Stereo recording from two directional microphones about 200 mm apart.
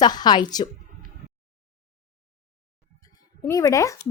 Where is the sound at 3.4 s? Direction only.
15° left (ahead or behind).